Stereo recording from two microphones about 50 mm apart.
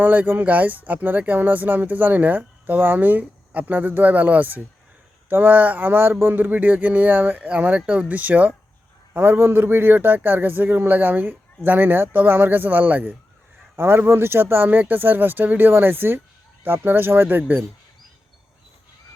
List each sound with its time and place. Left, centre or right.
0.0 s speech: right
6.3 s speech: right
7.4 s speech: right
9.1 s speech: right
13.7 s speech: right